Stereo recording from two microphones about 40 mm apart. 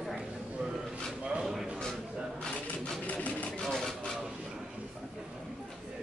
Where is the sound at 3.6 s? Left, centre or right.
Centre.